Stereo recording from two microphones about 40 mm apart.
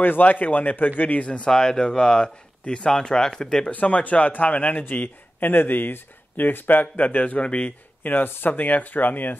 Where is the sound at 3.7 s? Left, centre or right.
Left.